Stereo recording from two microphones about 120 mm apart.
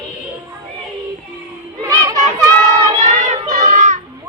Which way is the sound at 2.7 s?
75° right (ahead or behind).